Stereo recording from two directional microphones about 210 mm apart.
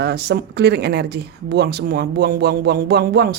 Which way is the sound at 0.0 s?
50° right (ahead or behind).